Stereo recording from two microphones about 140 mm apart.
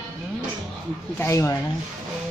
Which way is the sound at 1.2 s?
20° left (ahead or behind).